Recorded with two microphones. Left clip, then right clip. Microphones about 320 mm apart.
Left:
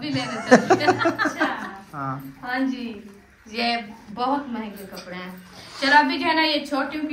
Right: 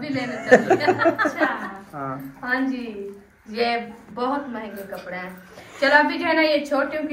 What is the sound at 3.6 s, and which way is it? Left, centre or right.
Speech, centre.